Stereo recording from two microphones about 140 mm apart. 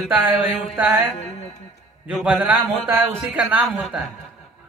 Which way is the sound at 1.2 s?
50° left (ahead or behind).